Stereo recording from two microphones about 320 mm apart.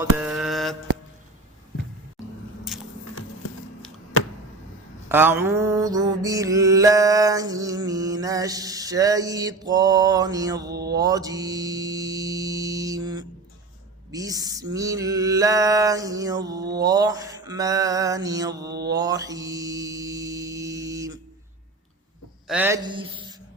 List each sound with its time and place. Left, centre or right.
0.0 s mantra: centre
3.4 s a sound: left
5.0 s mantra: centre
10.7 s music: right
10.9 s music: centre
14.1 s mantra: centre
18.7 s music: right
18.9 s mantra: centre
22.4 s speech: centre